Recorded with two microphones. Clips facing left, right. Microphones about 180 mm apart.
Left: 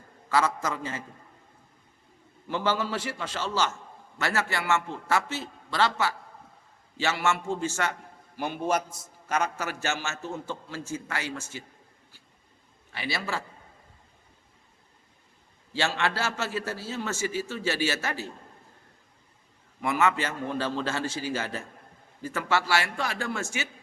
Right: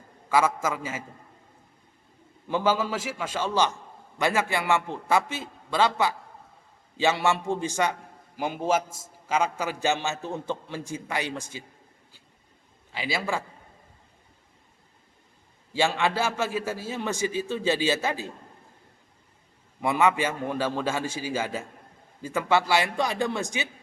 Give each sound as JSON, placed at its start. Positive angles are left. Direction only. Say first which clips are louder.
{"t": 0.3, "sound": "a man's voice", "louder": "right 2 dB", "side_deg": -10}
{"t": 2.5, "sound": "a man's voice", "louder": "right 3 dB", "side_deg": -10}
{"t": 13.1, "sound": "a man's voice", "louder": "right 5 dB", "side_deg": -15}
{"t": 15.7, "sound": "a man's voice", "louder": "right 3 dB", "side_deg": -15}
{"t": 19.8, "sound": "a man's voice", "louder": "right 3 dB", "side_deg": -15}